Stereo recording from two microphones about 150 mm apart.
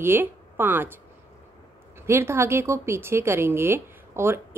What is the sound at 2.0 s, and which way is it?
A woman's voice, 15° right (ahead or behind).